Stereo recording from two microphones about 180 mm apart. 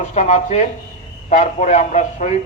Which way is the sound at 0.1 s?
40° left (ahead or behind).